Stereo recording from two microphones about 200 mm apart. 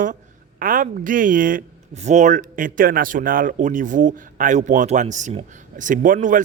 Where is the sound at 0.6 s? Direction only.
45° right (ahead or behind).